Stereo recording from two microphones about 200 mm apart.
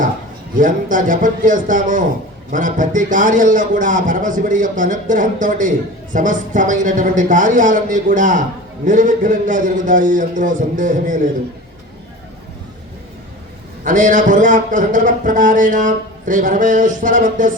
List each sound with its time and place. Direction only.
0.5 s a man's voice: 40° right (ahead or behind)
13.8 s a man's voice: 40° right (ahead or behind)